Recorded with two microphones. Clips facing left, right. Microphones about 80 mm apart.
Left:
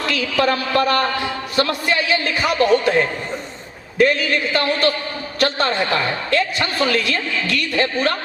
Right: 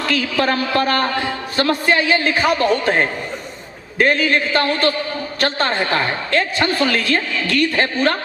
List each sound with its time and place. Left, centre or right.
0.1 s a woman's voice: right